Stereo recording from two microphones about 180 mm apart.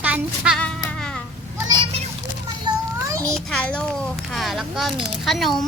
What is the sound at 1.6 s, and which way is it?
Children playing, 20° right (ahead or behind).